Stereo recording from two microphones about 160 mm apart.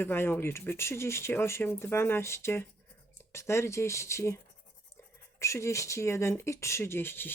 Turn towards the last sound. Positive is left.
turn(degrees=15)  # may be behind; listen again after turning